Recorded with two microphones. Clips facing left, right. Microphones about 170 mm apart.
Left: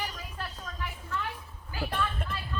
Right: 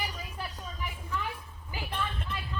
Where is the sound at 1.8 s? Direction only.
50° left (ahead or behind).